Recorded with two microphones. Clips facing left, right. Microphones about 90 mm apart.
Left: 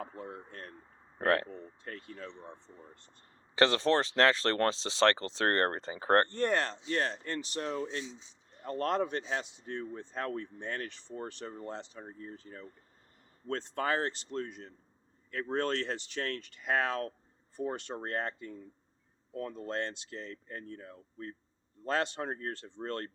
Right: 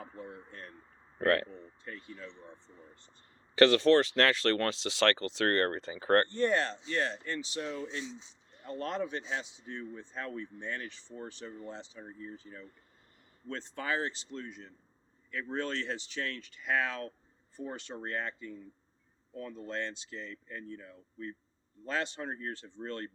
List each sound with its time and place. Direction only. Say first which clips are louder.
0.0 s speech: left 3 dB; 55° left (ahead or behind)
1.2 s speech: right 1 dB; 25° left (ahead or behind)
1.5 s speech: left 2 dB; 55° left (ahead or behind)
3.5 s speech: right 4 dB; 25° left (ahead or behind)
6.3 s speech: right 1 dB; 50° left (ahead or behind)
6.8 s speech: left 1 dB; 40° left (ahead or behind)
7.6 s speech: left 2 dB; 35° left (ahead or behind)
8.6 s speech: left 4 dB; 55° left (ahead or behind)